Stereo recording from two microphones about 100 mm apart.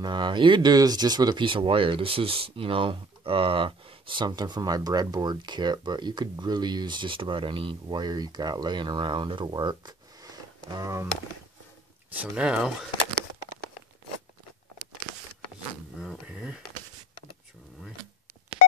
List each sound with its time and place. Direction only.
0.0 s speech: 50° right (ahead or behind); by 11.1 s 35° right (ahead or behind)
12.2 s speech: 10° right (ahead or behind)
16.0 s a sound: 5° right (ahead or behind)